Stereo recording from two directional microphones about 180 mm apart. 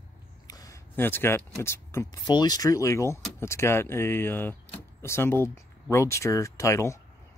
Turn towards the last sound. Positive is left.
turn(degrees=15)  # may be behind; listen again after turning